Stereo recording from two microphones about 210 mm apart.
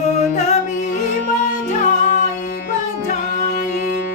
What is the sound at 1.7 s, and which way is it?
Music, 35° left (ahead or behind).